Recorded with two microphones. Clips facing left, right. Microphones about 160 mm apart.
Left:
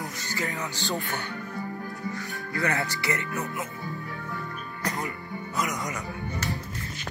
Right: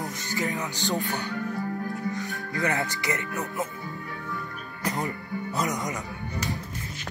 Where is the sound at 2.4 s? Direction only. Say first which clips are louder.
Left 1 dB; 20° right (ahead or behind).